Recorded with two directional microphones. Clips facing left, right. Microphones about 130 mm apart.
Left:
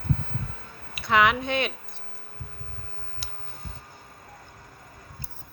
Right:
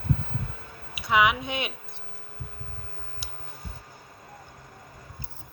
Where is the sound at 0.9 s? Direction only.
10° right (ahead or behind).